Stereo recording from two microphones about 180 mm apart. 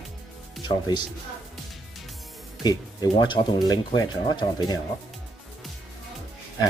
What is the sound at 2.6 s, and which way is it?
Speech, 25° left (ahead or behind).